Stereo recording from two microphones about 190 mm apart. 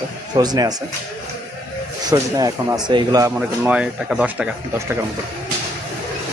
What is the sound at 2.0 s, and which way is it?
Speech, 15° right (ahead or behind).